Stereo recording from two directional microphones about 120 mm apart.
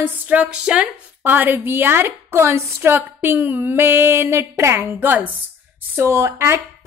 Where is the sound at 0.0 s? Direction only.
10° right (ahead or behind).